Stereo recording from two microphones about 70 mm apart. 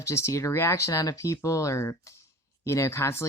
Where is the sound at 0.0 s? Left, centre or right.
Left.